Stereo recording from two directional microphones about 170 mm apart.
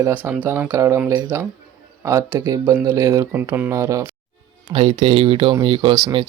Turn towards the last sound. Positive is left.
turn(degrees=-25)  # may be behind; listen again after turning